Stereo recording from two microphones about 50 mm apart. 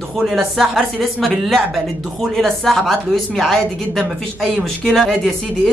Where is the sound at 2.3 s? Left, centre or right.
Centre.